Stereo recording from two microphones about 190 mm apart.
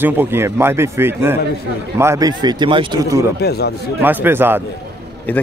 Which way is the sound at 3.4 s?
60° left (ahead or behind).